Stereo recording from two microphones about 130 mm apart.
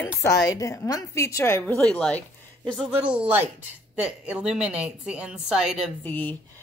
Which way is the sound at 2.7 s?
Centre (ahead or behind).